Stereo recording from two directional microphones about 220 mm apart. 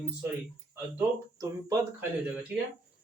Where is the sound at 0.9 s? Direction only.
15° right (ahead or behind).